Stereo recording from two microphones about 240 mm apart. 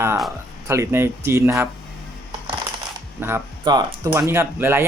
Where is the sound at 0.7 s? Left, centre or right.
Centre.